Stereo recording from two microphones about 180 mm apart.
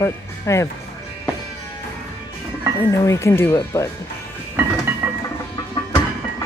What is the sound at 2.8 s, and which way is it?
Speech, 15° left (ahead or behind).